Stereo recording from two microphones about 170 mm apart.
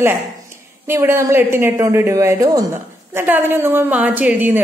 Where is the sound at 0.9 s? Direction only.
15° right (ahead or behind).